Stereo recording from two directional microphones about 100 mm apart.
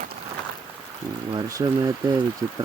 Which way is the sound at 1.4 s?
40° right (ahead or behind).